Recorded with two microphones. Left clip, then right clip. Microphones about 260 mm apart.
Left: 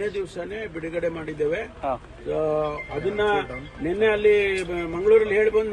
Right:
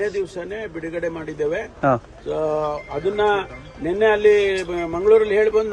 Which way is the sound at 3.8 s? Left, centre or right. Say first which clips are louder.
Right 4 dB; right.